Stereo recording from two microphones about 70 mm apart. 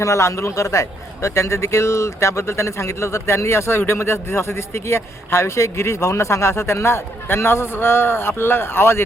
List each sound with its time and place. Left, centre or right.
0.0 s a man's voice: left